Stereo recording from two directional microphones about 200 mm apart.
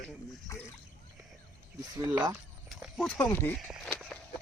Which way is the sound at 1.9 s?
15° right (ahead or behind).